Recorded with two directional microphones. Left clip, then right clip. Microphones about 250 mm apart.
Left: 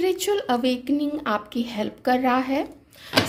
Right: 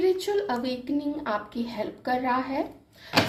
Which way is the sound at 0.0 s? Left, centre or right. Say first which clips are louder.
Left 2 dB; left.